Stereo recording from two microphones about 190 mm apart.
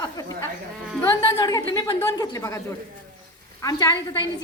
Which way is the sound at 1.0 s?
20° left (ahead or behind).